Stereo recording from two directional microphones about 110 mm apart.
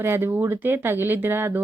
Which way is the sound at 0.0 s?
20° right (ahead or behind).